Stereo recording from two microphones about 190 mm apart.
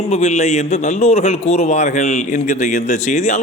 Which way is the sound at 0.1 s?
35° left (ahead or behind).